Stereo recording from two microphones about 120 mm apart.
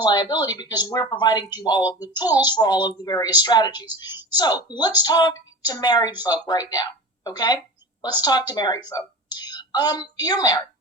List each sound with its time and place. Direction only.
0.0 s a woman's voice: 35° left (ahead or behind)